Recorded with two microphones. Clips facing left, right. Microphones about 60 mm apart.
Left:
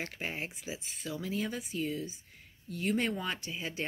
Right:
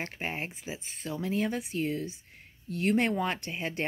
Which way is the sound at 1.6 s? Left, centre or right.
Right.